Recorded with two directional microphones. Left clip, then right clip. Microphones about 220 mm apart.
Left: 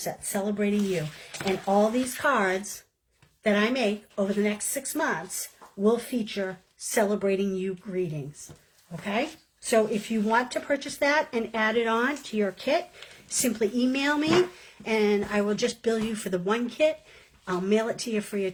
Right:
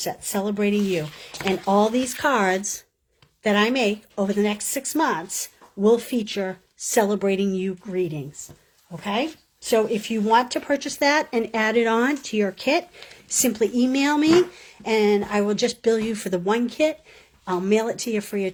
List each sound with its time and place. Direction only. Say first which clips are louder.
0.0 s a woman's voice: right 4 dB; 45° right (ahead or behind)
9.6 s a woman's voice: right 3 dB; 40° right (ahead or behind)